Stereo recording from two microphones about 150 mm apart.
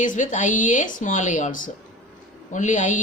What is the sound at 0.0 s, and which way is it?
Speech, 60° left (ahead or behind).